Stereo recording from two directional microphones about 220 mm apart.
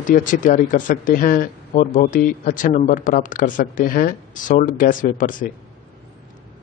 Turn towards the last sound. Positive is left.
turn(degrees=35)  # may be behind; listen again after turning